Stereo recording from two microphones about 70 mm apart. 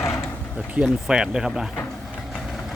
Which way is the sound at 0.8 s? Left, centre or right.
Centre.